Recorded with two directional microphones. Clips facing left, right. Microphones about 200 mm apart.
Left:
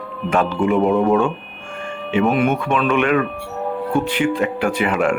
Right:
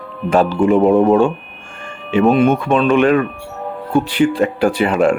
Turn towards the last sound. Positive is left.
turn(degrees=-35)  # may be behind; listen again after turning